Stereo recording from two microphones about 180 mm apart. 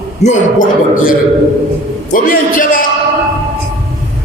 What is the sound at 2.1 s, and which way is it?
Speech, 50° left (ahead or behind).